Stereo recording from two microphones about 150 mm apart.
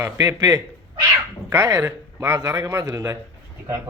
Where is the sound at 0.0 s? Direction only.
20° right (ahead or behind).